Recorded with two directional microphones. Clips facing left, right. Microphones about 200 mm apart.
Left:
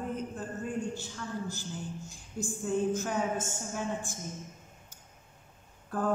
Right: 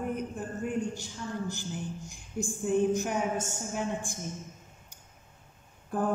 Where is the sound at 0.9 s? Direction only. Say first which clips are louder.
Right 1 dB; 15° right (ahead or behind).